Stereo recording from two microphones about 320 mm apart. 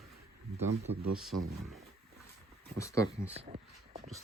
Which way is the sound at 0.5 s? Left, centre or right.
Centre.